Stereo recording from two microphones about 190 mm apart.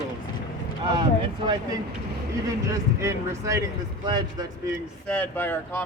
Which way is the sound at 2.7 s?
15° right (ahead or behind).